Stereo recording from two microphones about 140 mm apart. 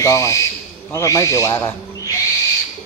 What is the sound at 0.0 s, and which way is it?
Owl, 20° left (ahead or behind).